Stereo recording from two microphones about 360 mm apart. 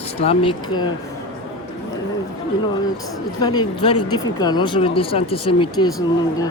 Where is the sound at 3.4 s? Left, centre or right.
Centre.